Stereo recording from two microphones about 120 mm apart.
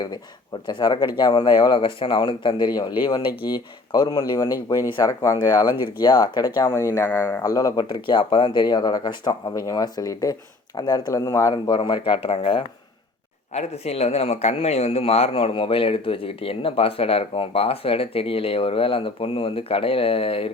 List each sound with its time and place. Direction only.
0.7 s speech: 35° left (ahead or behind)
6.7 s speech: 25° left (ahead or behind); by 12.6 s 50° left (ahead or behind)
13.5 s speech: 65° left (ahead or behind)